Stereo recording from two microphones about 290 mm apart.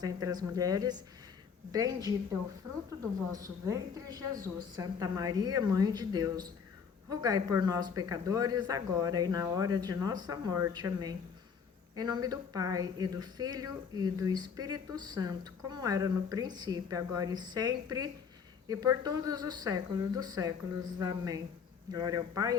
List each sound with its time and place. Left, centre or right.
0.0 s speech: centre
3.3 s speech: centre